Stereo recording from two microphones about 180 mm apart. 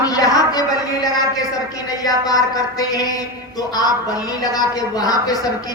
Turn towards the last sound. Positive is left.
turn(degrees=20)  # may be behind; listen again after turning